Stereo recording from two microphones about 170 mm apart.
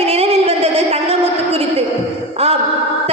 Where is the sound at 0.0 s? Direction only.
35° right (ahead or behind).